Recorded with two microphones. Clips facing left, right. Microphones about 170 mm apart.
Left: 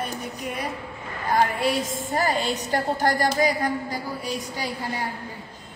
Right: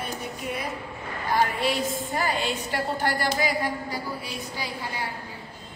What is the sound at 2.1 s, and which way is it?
A woman's voice, 40° left (ahead or behind).